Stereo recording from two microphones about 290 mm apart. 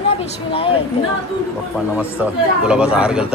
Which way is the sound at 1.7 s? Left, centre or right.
Centre.